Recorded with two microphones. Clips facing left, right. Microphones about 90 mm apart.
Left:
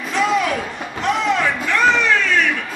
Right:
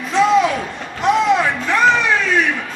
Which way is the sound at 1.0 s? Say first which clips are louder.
Right 4 dB; 20° right (ahead or behind).